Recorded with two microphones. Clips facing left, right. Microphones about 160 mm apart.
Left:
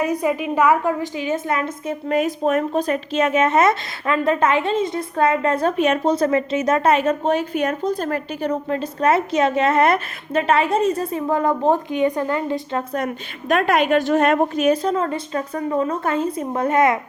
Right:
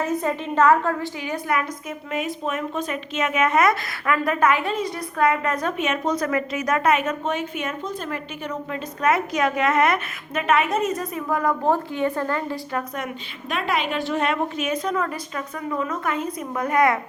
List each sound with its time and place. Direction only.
0.0 s a woman's voice: 15° left (ahead or behind)
2.0 s speech: 40° left (ahead or behind); by 13.0 s 25° left (ahead or behind)
13.0 s a woman's voice: 45° left (ahead or behind); by 17.0 s 25° left (ahead or behind)